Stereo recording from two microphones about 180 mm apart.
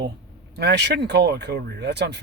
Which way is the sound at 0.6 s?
70° right (ahead or behind).